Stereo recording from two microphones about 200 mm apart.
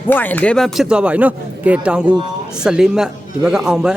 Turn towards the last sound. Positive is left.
turn(degrees=-5)  # may be behind; listen again after turning